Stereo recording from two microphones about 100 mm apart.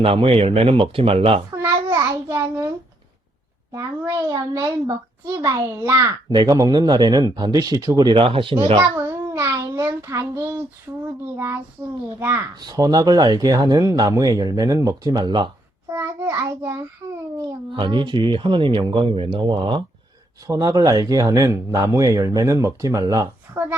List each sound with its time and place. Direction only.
0.0 s speech: 70° right (ahead or behind)
1.5 s a sound: 30° right (ahead or behind)
3.7 s speech: 35° right (ahead or behind)
8.1 s speech: 60° right (ahead or behind)
9.0 s child singing: 30° right (ahead or behind)
11.0 s a child's voice: 25° right (ahead or behind)
12.5 s speech: 40° right (ahead or behind)
15.9 s a child's voice: 25° right (ahead or behind)
17.7 s speech: 55° right (ahead or behind)
20.5 s speech: 35° right (ahead or behind)
23.6 s a woman's voice: 20° right (ahead or behind)